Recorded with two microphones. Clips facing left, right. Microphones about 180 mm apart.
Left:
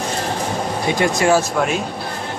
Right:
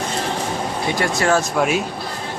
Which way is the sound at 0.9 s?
20° left (ahead or behind).